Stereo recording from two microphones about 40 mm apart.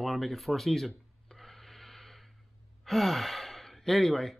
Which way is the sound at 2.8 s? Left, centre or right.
Centre.